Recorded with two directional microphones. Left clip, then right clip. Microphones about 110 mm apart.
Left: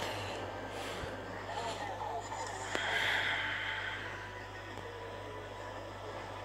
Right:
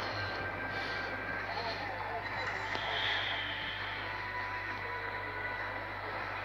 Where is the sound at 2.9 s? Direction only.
90° left.